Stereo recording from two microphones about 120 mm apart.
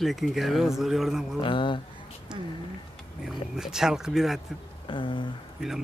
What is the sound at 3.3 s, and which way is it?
Speech, 5° right (ahead or behind).